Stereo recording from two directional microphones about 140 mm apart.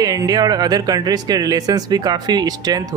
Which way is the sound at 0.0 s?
25° right (ahead or behind).